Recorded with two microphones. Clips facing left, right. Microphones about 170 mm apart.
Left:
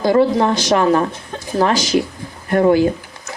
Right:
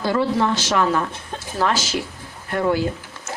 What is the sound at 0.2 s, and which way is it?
Speech, 20° left (ahead or behind).